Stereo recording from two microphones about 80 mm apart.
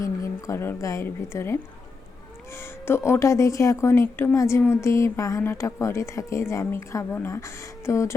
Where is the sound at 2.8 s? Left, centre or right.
Left.